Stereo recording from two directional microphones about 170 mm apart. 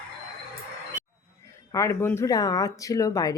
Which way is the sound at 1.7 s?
15° left (ahead or behind).